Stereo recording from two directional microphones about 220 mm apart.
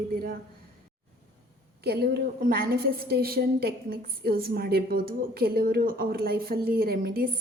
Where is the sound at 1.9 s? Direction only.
45° right (ahead or behind).